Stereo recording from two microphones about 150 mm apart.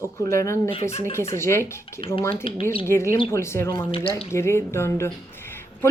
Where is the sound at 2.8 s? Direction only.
15° left (ahead or behind).